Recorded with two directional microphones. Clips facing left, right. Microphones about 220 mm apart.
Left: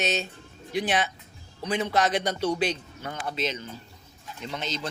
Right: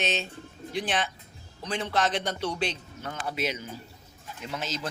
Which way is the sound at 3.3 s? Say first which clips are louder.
Even; 10° right (ahead or behind).